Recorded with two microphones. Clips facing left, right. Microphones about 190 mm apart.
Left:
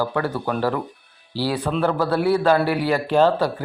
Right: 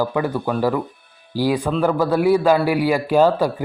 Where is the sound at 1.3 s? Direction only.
15° right (ahead or behind).